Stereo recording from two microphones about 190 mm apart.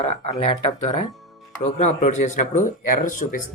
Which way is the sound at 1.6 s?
35° left (ahead or behind).